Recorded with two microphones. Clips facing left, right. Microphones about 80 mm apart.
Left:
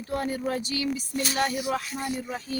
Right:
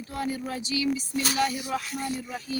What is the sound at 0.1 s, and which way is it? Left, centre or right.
A woman's voice, left.